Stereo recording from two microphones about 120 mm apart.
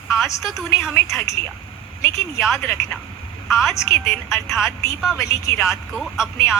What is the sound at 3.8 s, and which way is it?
A woman's voice, 25° left (ahead or behind).